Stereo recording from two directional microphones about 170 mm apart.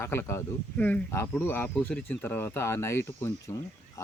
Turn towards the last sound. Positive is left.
turn(degrees=15)  # may be behind; listen again after turning